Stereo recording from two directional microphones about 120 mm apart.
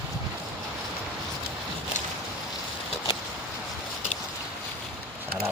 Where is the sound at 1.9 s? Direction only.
90° left.